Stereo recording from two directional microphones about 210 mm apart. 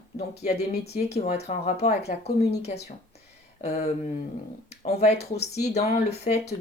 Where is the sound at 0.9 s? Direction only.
30° left (ahead or behind).